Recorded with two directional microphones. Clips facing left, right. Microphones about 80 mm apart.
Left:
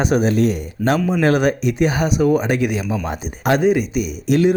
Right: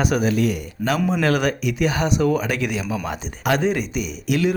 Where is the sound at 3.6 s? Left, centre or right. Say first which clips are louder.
Left 5 dB; centre.